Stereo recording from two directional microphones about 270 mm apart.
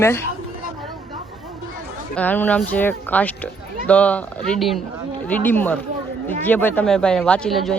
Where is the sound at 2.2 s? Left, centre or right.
Centre.